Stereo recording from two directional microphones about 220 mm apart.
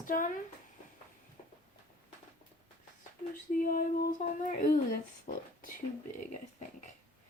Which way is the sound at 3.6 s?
40° left (ahead or behind).